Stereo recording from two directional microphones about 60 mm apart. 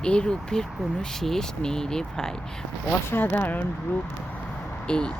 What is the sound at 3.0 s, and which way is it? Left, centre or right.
Speech, left.